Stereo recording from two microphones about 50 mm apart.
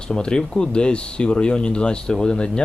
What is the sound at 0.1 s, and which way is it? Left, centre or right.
Speech, centre.